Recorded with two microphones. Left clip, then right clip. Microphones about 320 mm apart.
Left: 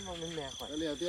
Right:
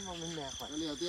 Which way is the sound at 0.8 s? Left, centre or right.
Centre.